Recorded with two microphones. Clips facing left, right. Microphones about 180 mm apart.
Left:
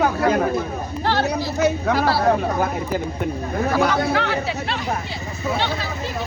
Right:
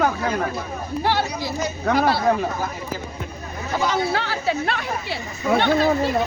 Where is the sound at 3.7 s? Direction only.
60° left (ahead or behind).